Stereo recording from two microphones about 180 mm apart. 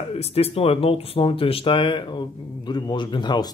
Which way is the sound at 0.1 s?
35° left (ahead or behind).